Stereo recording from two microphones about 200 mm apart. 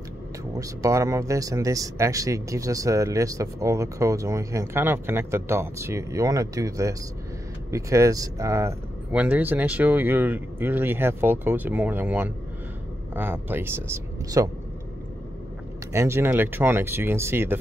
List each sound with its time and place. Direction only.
0.6 s speech: 15° right (ahead or behind)
15.9 s speech: 15° right (ahead or behind)